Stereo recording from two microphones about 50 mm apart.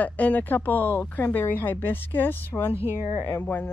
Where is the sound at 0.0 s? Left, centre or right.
Left.